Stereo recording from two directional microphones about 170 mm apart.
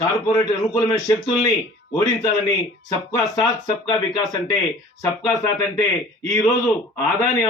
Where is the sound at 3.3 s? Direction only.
20° left (ahead or behind).